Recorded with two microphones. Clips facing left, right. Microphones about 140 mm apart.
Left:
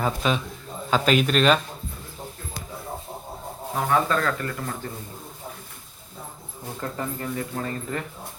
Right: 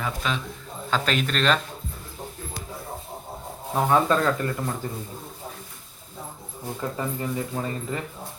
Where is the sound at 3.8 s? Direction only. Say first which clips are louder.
Right 2 dB; 20° right (ahead or behind).